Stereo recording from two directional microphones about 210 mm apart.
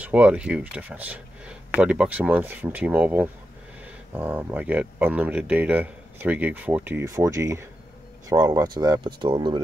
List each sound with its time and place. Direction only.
0.0 s speech: 5° right (ahead or behind); by 9.6 s 20° right (ahead or behind)